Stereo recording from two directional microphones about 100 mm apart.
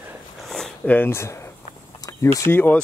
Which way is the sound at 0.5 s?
5° left (ahead or behind).